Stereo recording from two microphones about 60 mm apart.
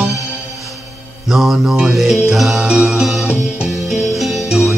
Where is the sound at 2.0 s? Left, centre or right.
Centre.